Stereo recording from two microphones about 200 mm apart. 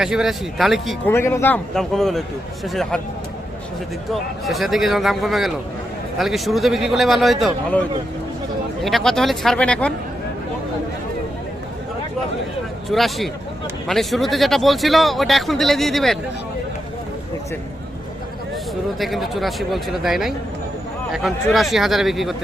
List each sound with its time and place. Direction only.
0.0 s speech: 5° right (ahead or behind)
1.0 s speech: 10° left (ahead or behind)
4.1 s speech: centre (ahead or behind)
8.8 s speech: centre (ahead or behind)
12.9 s speech: centre (ahead or behind)
18.9 s speech: centre (ahead or behind)